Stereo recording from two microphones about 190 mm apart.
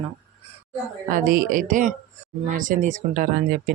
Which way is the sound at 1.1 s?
50° right (ahead or behind).